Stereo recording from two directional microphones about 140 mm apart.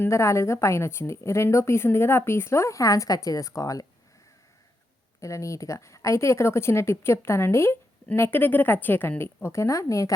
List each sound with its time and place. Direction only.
0.0 s speech: 20° left (ahead or behind)
5.2 s speech: 20° left (ahead or behind)